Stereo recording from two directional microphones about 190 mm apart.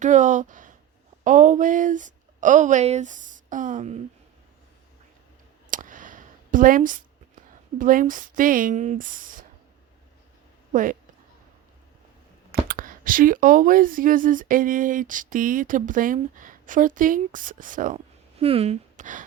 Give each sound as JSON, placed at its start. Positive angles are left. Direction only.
{"t": 0.0, "sound": "speech", "side_deg": -40}
{"t": 5.7, "sound": "a sound", "side_deg": -45}
{"t": 7.8, "sound": "speech", "side_deg": -45}
{"t": 10.7, "sound": "a woman's voice", "side_deg": -45}
{"t": 12.5, "sound": "speech", "side_deg": -50}